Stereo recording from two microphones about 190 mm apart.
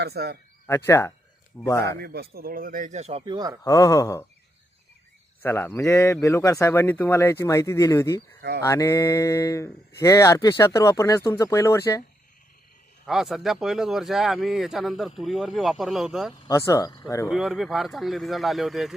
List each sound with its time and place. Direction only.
0.0 s speech: 60° right (ahead or behind)
0.7 s speech: 15° left (ahead or behind)
2.0 s speech: 55° right (ahead or behind); by 3.6 s 20° right (ahead or behind)
3.6 s speech: 15° left (ahead or behind)
5.4 s speech: 10° left (ahead or behind)
8.4 s speech: 60° right (ahead or behind)
8.6 s speech: 15° left (ahead or behind)
13.1 s speech: centre (ahead or behind)
16.5 s speech: 15° left (ahead or behind)
17.2 s speech: centre (ahead or behind)